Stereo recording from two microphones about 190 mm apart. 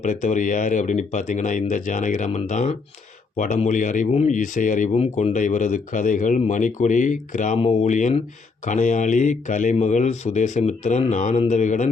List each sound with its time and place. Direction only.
0.0 s speech: 40° left (ahead or behind)